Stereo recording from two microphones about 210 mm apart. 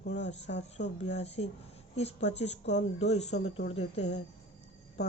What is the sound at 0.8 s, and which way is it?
A woman's voice, 35° left (ahead or behind).